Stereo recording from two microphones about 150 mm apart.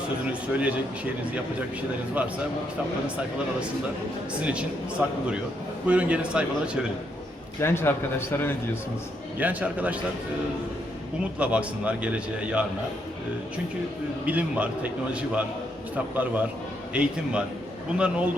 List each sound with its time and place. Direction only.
0.5 s a man's voice: 10° right (ahead or behind)
4.4 s a man's voice: 10° right (ahead or behind)
7.6 s a man's voice: 15° left (ahead or behind)
9.4 s a man's voice: 10° right (ahead or behind)
11.3 s a man's voice: 10° right (ahead or behind)
14.3 s a man's voice: 10° right (ahead or behind)
16.1 s a man's voice: 10° right (ahead or behind)